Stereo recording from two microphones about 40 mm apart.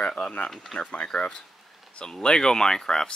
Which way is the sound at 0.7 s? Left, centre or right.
Centre.